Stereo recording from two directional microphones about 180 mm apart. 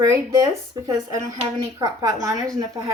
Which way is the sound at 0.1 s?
20° right (ahead or behind).